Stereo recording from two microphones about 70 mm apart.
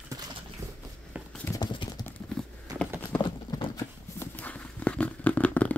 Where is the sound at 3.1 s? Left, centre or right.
Left.